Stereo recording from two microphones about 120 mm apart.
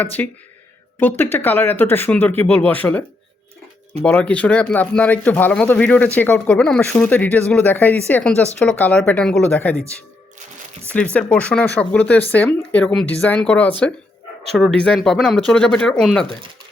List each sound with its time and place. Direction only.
0.0 s speech: 15° left (ahead or behind)
4.0 s speech: 10° left (ahead or behind)
10.9 s speech: 10° left (ahead or behind)